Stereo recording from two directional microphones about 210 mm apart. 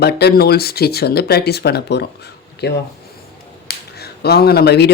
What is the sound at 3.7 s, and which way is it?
Finger snapping, 50° left (ahead or behind).